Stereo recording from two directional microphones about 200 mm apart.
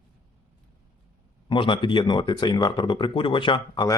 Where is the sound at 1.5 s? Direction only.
25° left (ahead or behind).